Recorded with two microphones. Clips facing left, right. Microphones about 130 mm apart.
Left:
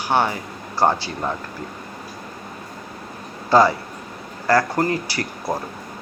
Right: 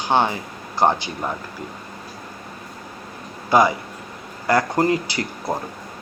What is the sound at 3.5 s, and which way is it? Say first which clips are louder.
Speech: left 1 dB; 15° right (ahead or behind).